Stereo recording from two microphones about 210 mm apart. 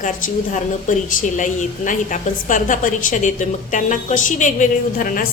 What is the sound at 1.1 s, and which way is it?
A woman's voice, 40° left (ahead or behind).